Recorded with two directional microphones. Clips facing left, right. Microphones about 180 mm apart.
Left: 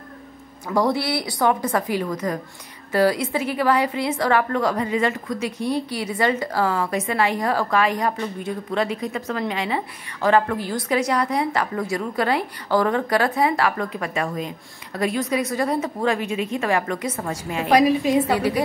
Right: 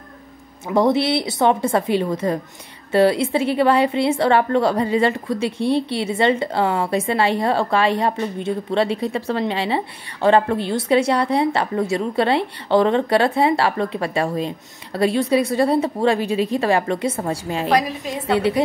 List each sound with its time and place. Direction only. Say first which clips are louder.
0.7 s a woman's voice: right 4 dB; 20° right (ahead or behind)
17.6 s a woman's voice: left 5 dB; 10° left (ahead or behind)